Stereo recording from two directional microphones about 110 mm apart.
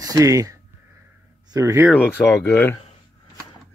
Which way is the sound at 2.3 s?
25° left (ahead or behind).